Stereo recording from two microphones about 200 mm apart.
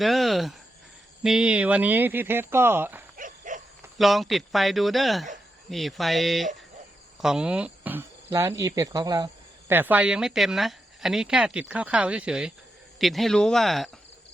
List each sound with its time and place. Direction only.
0.0 s speech: centre (ahead or behind)
3.2 s wild animals: 40° right (ahead or behind)
3.9 s speech: centre (ahead or behind)